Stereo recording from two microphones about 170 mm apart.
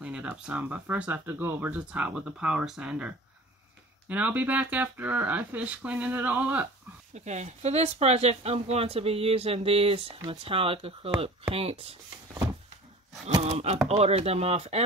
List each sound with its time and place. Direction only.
0.0 s speech: 5° right (ahead or behind)
7.2 s speech: 40° right (ahead or behind)
13.3 s speech: 35° right (ahead or behind)